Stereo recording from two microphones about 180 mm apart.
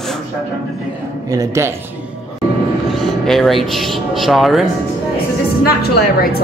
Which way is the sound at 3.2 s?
Centre (ahead or behind).